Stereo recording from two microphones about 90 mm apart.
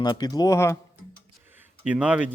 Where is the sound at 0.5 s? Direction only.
30° left (ahead or behind).